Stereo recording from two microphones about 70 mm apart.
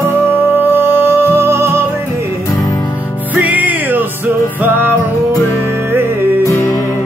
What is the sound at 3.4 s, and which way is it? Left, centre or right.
Music, right.